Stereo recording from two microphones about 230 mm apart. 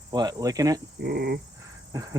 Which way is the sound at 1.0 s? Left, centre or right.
Right.